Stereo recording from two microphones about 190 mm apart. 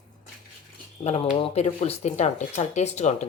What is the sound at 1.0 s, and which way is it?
Speech, 35° left (ahead or behind).